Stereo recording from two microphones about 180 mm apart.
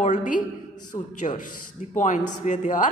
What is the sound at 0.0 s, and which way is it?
Speech, 45° left (ahead or behind).